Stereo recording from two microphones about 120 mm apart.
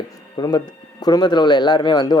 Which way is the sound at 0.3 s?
35° left (ahead or behind).